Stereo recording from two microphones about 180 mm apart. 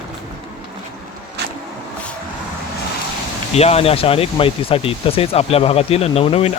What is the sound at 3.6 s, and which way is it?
Speech, 35° left (ahead or behind).